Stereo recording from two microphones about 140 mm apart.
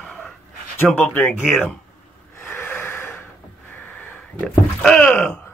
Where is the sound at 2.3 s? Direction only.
15° left (ahead or behind).